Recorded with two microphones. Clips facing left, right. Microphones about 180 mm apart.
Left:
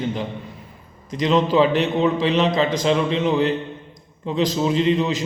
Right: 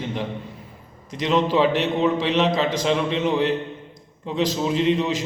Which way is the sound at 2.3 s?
5° right (ahead or behind).